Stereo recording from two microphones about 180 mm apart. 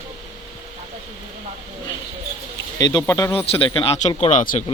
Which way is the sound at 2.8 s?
20° left (ahead or behind).